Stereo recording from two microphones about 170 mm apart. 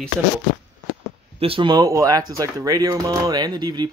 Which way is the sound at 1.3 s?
35° right (ahead or behind).